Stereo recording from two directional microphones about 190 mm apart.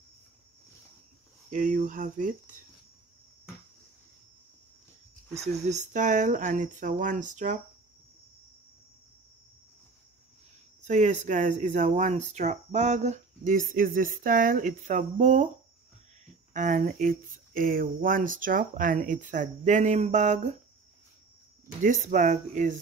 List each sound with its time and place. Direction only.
1.5 s speech: 45° right (ahead or behind)
5.3 s speech: 35° right (ahead or behind)
10.8 s speech: 40° right (ahead or behind)
16.5 s speech: 40° right (ahead or behind)
21.8 s speech: 40° right (ahead or behind)